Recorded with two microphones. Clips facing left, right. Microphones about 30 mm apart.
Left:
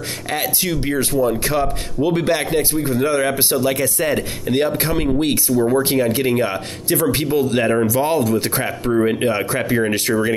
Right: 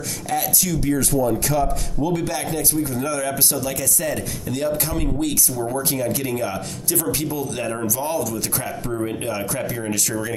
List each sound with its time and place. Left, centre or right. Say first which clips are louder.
0.3 s speech: left 1 dB; left